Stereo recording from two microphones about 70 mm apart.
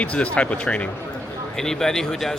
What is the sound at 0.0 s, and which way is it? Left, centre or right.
Speech, centre.